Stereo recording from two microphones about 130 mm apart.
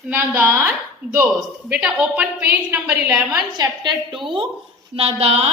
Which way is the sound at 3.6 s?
35° right (ahead or behind).